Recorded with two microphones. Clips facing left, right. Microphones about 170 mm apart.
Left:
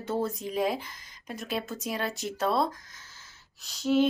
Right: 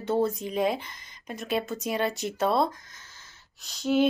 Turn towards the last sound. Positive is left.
turn(degrees=0)  # may be behind; listen again after turning